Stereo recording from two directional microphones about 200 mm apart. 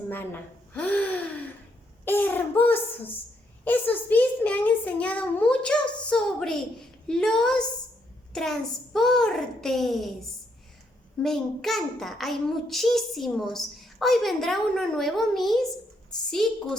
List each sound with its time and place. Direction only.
0.7 s gasp: 5° left (ahead or behind)
2.0 s a child's voice: 10° left (ahead or behind)
11.2 s a child's voice: centre (ahead or behind)